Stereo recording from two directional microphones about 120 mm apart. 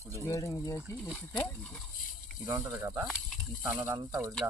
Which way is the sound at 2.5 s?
25° right (ahead or behind).